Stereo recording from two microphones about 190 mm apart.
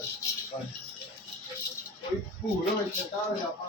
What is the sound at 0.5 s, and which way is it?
Speech, 25° left (ahead or behind).